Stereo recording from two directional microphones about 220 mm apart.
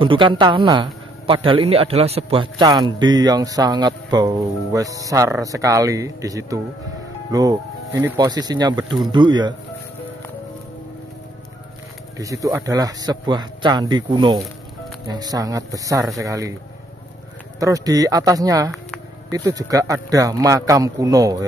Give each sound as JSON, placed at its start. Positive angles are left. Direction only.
{"t": 0.0, "sound": "a man's voice", "side_deg": -20}
{"t": 12.2, "sound": "a man's voice", "side_deg": -15}
{"t": 17.6, "sound": "speech", "side_deg": -15}